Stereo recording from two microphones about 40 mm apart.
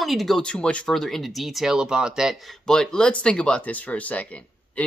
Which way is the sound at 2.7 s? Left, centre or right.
Centre.